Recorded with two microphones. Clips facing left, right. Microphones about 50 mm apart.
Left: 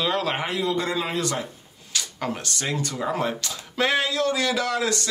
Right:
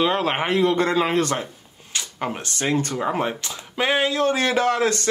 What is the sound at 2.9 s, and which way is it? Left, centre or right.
Speech, right.